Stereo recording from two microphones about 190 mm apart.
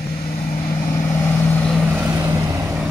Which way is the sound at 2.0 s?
10° right (ahead or behind).